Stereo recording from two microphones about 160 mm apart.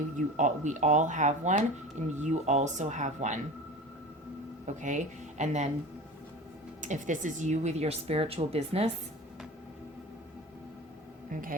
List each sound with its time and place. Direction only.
0.3 s speech: 50° right (ahead or behind)
4.6 s speech: 50° right (ahead or behind)
6.8 s speech: 50° right (ahead or behind)
11.3 s speech: 60° right (ahead or behind)